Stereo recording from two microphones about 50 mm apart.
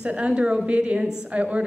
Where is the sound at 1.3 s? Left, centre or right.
Right.